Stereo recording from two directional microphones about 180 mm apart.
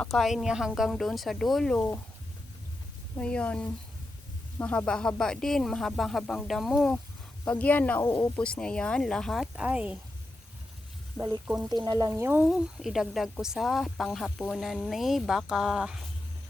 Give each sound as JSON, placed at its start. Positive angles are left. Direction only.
{"t": 0.0, "sound": "speech", "side_deg": 0}
{"t": 3.2, "sound": "speech", "side_deg": 5}
{"t": 11.2, "sound": "frying", "side_deg": -5}
{"t": 11.7, "sound": "frying", "side_deg": -20}
{"t": 12.5, "sound": "speech", "side_deg": 0}